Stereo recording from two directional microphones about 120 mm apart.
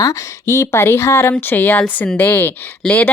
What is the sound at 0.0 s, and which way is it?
Speech, 25° left (ahead or behind).